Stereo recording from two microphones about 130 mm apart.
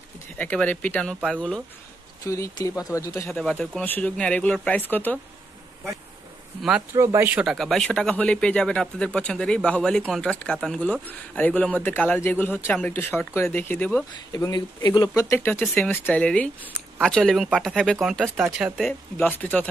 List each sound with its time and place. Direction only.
0.4 s speech: 10° left (ahead or behind)
2.2 s speech: 25° left (ahead or behind)
3.3 s speech: 5° left (ahead or behind)
6.9 s speech: 20° right (ahead or behind)
7.4 s speech: centre (ahead or behind)
14.3 s speech: 30° left (ahead or behind); by 19.7 s 10° left (ahead or behind)